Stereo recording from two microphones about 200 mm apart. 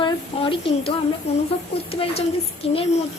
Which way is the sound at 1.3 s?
30° left (ahead or behind).